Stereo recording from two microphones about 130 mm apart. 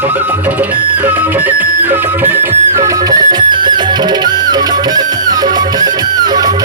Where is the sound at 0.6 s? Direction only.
15° right (ahead or behind).